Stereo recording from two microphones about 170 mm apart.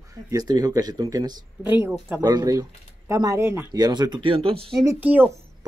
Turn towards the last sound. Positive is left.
turn(degrees=-10)  # may be behind; listen again after turning